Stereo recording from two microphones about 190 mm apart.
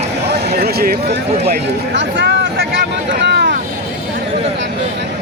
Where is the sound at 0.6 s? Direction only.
55° right (ahead or behind).